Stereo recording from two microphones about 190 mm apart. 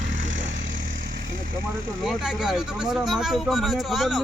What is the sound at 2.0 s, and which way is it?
Speech, centre (ahead or behind).